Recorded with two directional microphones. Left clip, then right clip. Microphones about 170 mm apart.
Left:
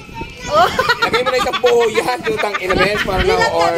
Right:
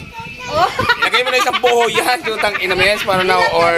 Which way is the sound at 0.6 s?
35° left (ahead or behind).